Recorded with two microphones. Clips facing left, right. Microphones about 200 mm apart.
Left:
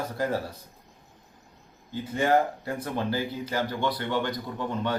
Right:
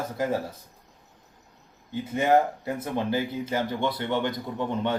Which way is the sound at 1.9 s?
20° right (ahead or behind).